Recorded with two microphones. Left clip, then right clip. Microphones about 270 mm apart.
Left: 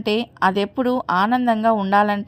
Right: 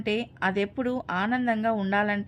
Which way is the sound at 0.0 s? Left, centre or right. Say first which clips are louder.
Left 8 dB; centre.